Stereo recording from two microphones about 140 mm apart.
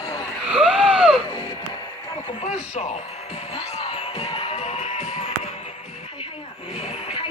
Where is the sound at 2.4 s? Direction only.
55° left (ahead or behind).